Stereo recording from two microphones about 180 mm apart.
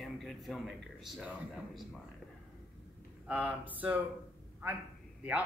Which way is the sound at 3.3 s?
10° right (ahead or behind).